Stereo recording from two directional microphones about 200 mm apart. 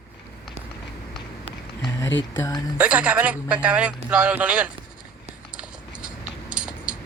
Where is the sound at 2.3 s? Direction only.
15° left (ahead or behind).